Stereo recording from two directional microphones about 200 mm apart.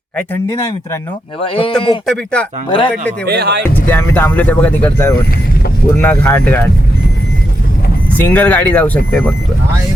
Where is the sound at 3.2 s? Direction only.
55° right (ahead or behind).